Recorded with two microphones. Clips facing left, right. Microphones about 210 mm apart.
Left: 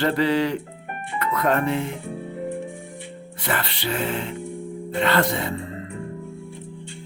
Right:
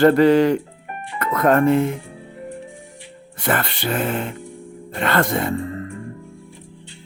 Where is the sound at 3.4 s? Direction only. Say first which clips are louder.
Right 5 dB; 50° right (ahead or behind).